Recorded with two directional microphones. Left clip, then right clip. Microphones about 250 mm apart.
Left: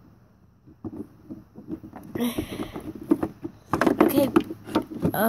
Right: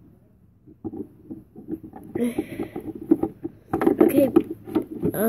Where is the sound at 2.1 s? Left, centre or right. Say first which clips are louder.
Right 2 dB; centre.